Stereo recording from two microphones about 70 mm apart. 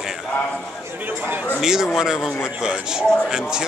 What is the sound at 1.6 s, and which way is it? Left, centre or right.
A man's voice, centre.